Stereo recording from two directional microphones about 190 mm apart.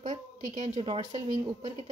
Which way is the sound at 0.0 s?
40° right (ahead or behind).